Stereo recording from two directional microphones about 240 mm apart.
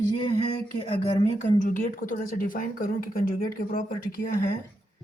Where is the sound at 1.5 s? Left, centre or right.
Left.